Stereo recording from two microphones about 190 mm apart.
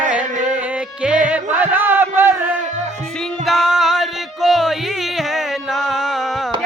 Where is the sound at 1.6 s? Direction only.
10° right (ahead or behind).